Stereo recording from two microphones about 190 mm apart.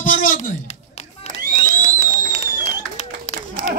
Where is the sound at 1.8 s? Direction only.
35° left (ahead or behind).